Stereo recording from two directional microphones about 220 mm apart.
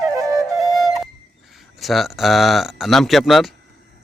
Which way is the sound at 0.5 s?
Centre (ahead or behind).